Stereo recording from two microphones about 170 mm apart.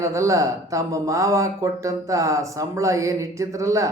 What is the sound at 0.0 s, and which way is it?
A man's voice, 15° right (ahead or behind).